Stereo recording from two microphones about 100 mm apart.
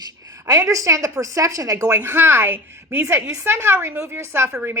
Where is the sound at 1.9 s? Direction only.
20° right (ahead or behind).